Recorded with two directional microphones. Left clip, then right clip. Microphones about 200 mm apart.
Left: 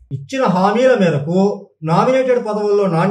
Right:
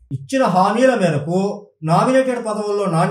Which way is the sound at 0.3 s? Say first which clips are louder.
Even; 35° right (ahead or behind).